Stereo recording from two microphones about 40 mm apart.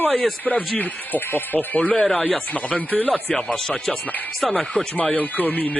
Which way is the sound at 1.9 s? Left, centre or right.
Centre.